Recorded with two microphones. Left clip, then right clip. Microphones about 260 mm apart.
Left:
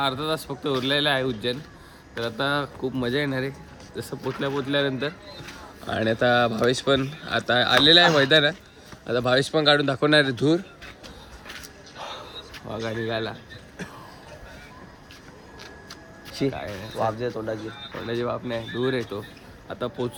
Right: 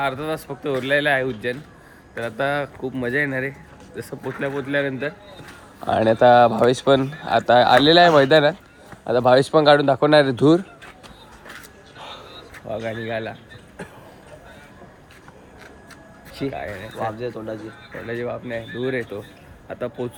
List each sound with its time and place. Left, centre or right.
0.0 s speech: centre
5.8 s speech: centre
12.7 s speech: centre
16.6 s speech: centre
16.9 s speech: left
17.9 s speech: centre